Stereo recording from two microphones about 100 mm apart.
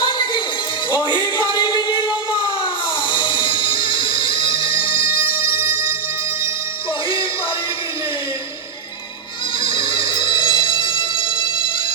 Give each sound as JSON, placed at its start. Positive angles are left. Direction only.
{"t": 0.0, "sound": "music", "side_deg": 50}
{"t": 1.4, "sound": "a sound", "side_deg": 50}
{"t": 3.1, "sound": "music", "side_deg": 55}
{"t": 9.6, "sound": "music", "side_deg": 55}